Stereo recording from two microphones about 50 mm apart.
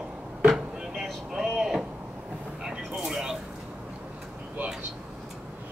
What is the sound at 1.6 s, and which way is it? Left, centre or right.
Speech, centre.